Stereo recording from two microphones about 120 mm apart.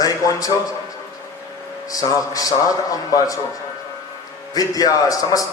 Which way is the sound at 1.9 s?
30° left (ahead or behind).